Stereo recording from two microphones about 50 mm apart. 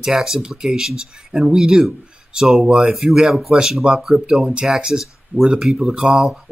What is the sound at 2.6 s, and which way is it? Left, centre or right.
Speech, centre.